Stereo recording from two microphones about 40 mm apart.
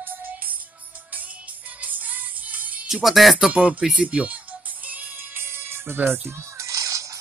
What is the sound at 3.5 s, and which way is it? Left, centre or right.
Speech, right.